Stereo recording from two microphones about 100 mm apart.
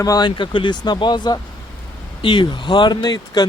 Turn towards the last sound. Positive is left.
turn(degrees=45)  # may be behind; listen again after turning